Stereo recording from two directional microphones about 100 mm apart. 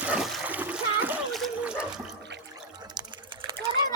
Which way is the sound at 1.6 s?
10° right (ahead or behind).